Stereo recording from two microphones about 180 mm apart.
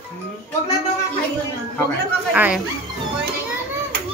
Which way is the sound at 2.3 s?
5° right (ahead or behind).